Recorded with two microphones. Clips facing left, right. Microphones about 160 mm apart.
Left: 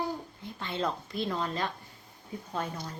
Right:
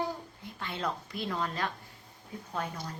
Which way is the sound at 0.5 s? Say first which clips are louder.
Left 3 dB; 25° left (ahead or behind).